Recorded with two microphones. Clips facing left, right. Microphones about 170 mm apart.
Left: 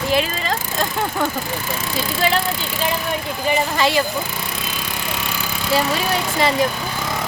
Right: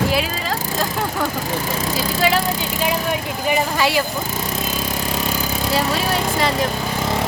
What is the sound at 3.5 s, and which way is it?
Speech, 10° right (ahead or behind).